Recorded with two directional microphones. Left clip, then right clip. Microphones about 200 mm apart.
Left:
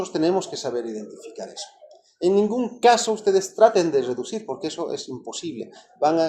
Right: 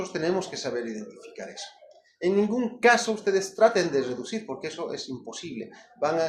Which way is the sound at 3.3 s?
45° left (ahead or behind).